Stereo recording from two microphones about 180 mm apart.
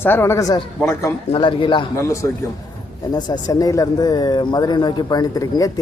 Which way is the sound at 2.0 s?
15° left (ahead or behind).